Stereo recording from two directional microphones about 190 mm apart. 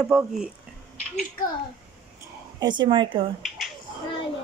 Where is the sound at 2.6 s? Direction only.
25° right (ahead or behind).